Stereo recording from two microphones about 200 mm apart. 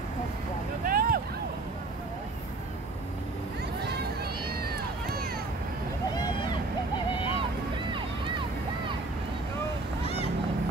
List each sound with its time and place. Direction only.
0.8 s vehicle: 45° right (ahead or behind)
3.8 s run: 55° right (ahead or behind)
6.1 s vehicle: 20° left (ahead or behind)